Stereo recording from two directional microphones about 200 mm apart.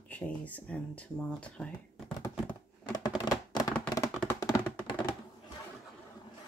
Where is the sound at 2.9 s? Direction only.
20° left (ahead or behind).